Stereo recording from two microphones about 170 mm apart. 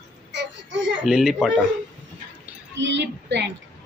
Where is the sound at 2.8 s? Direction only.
90° right.